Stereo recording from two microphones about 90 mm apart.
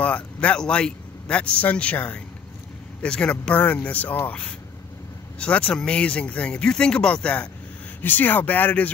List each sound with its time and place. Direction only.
0.0 s speech: 15° left (ahead or behind)